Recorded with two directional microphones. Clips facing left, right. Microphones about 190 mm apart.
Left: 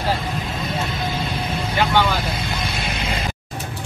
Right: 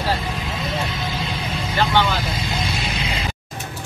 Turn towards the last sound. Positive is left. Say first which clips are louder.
# left 1 dB
turn(degrees=50)  # may be behind; listen again after turning